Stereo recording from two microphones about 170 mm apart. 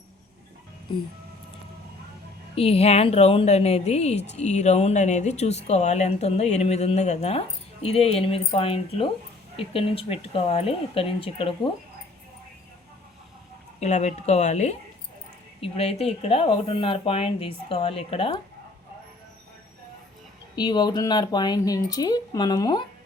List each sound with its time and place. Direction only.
0.9 s speech: 30° left (ahead or behind)
2.6 s speech: 35° left (ahead or behind)
13.7 s speech: 40° left (ahead or behind)
20.6 s speech: 25° left (ahead or behind)